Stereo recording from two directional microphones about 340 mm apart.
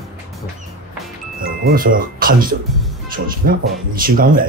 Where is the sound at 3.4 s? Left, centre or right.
Right.